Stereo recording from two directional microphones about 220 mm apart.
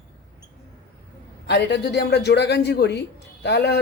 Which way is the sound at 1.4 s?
50° left (ahead or behind).